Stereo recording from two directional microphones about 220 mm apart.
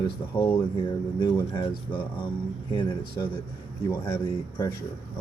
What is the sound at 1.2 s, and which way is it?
Speech, 20° left (ahead or behind).